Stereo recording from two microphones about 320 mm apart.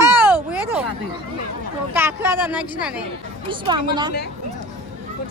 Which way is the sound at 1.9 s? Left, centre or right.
Centre.